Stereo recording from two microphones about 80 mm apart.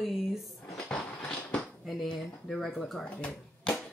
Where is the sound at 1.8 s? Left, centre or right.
Centre.